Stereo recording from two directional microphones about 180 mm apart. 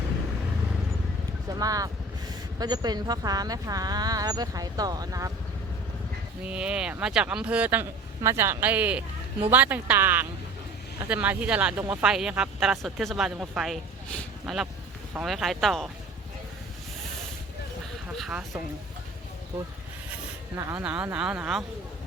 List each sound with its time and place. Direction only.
1.5 s speech: 20° right (ahead or behind)
6.4 s speech: 5° right (ahead or behind)
18.2 s speech: 5° right (ahead or behind)
20.6 s speech: 15° right (ahead or behind)
20.8 s speech: 5° right (ahead or behind)